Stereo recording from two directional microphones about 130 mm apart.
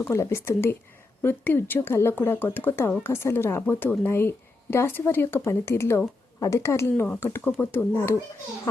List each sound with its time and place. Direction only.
0.0 s speech: 20° left (ahead or behind)